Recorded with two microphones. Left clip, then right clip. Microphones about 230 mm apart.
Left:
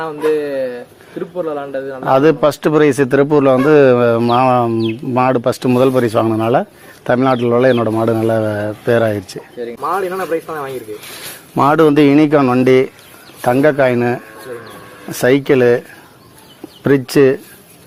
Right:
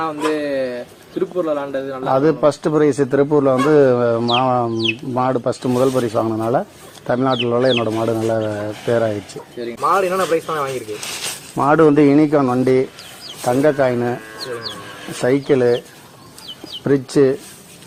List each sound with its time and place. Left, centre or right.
0.2 s speech: centre
2.0 s a man's voice: left
9.6 s speech: centre
11.5 s a man's voice: left
15.2 s a man's voice: left
16.8 s a man's voice: left